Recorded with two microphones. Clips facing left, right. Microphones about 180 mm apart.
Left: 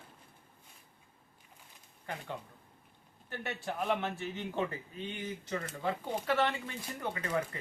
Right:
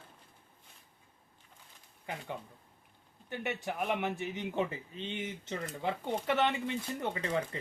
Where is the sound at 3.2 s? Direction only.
15° right (ahead or behind).